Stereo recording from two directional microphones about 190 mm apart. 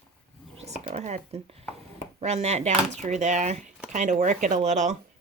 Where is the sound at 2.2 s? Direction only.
35° right (ahead or behind).